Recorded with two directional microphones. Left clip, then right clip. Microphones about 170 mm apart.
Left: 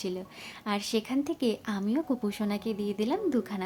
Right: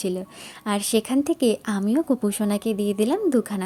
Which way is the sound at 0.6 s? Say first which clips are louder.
Right 7 dB; 30° right (ahead or behind).